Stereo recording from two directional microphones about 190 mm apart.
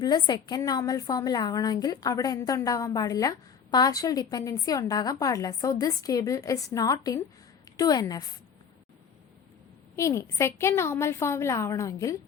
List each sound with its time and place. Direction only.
0.0 s a woman's voice: 20° left (ahead or behind)
9.9 s a woman's voice: 15° left (ahead or behind)